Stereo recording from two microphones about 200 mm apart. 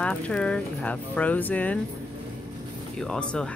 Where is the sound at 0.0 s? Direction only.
5° left (ahead or behind).